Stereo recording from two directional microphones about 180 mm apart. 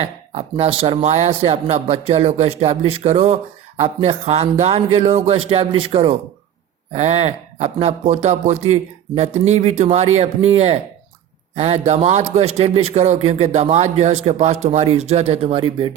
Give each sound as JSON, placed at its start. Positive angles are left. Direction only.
{"t": 0.0, "sound": "speech", "side_deg": -35}